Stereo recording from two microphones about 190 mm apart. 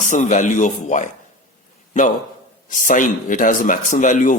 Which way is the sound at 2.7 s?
45° left (ahead or behind).